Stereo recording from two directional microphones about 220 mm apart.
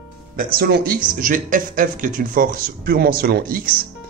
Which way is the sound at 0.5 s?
40° right (ahead or behind).